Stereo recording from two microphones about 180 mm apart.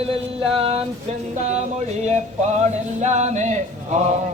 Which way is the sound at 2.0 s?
40° right (ahead or behind).